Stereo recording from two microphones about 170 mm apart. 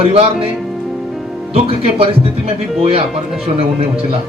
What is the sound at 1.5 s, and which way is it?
Speech, 35° right (ahead or behind).